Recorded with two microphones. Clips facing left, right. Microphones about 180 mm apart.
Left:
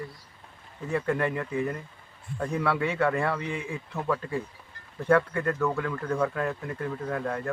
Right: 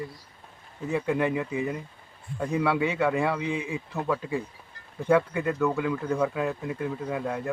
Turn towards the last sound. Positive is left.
turn(degrees=-10)  # may be behind; listen again after turning